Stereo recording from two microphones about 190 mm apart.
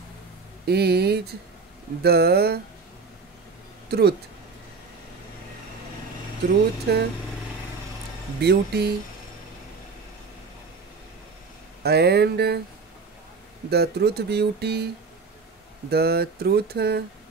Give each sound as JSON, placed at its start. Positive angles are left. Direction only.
{"t": 0.7, "sound": "speech", "side_deg": -60}
{"t": 3.9, "sound": "speech", "side_deg": -60}
{"t": 6.9, "sound": "speech", "side_deg": -60}
{"t": 8.4, "sound": "speech", "side_deg": -60}
{"t": 11.8, "sound": "speech", "side_deg": -60}
{"t": 13.7, "sound": "speech", "side_deg": -60}
{"t": 15.9, "sound": "speech", "side_deg": -55}